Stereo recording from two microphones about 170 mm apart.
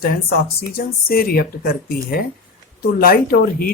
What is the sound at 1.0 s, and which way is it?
Speech, 60° left (ahead or behind).